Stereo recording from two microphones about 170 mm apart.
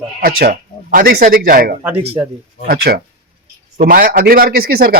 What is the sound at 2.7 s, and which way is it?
Speech, 60° right (ahead or behind).